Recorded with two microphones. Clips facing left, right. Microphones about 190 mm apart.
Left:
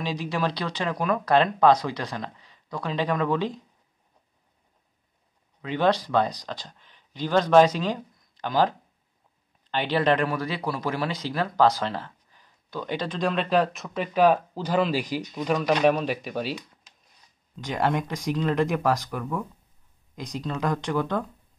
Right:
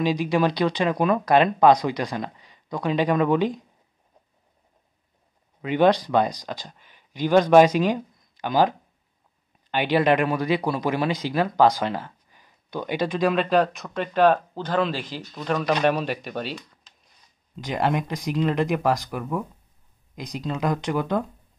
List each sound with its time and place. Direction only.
0.0 s speech: 15° right (ahead or behind)
5.6 s speech: 15° right (ahead or behind); by 16.6 s 5° left (ahead or behind)
17.6 s speech: 5° right (ahead or behind)
20.2 s speech: centre (ahead or behind)